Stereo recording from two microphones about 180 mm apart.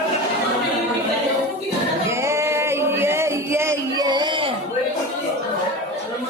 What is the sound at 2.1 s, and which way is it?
Singing, 15° right (ahead or behind).